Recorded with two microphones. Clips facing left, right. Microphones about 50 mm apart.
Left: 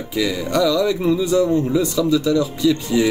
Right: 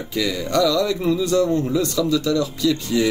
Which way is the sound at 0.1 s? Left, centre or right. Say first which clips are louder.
Left 1 dB; centre.